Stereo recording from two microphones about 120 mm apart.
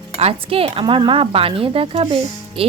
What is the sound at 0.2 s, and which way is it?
Speech, 55° right (ahead or behind).